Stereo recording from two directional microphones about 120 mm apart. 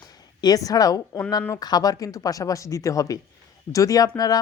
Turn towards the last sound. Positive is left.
turn(degrees=30)  # may be behind; listen again after turning